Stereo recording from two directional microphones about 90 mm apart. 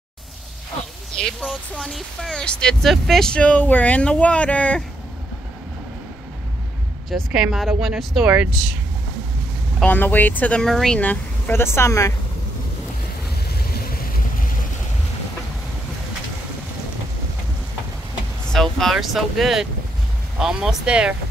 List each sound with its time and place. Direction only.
1.1 s speech: 5° left (ahead or behind)
7.1 s speech: 5° right (ahead or behind)
9.8 s speech: 20° left (ahead or behind)
10.6 s speech: 5° left (ahead or behind)
11.0 s speech: 20° left (ahead or behind)
18.5 s speech: 5° left (ahead or behind); by 21.1 s 10° right (ahead or behind)